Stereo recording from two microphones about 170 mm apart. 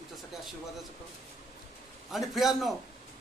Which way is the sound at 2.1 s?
Centre (ahead or behind).